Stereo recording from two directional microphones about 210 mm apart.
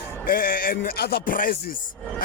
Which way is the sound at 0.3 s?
45° left (ahead or behind).